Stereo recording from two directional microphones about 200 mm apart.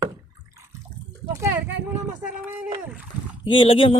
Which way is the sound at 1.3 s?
10° right (ahead or behind).